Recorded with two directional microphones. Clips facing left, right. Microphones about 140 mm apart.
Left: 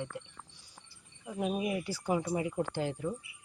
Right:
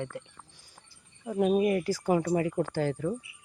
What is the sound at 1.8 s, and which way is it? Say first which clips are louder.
Speech: right 6 dB; 40° right (ahead or behind).